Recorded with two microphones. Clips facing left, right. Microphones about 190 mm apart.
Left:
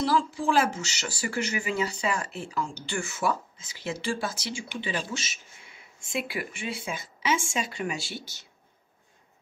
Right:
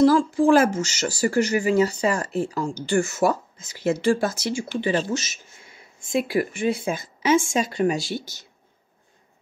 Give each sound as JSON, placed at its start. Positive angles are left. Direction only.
{"t": 0.0, "sound": "speech", "side_deg": -45}